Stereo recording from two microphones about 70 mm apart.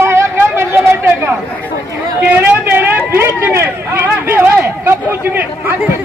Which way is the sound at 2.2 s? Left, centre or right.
Right.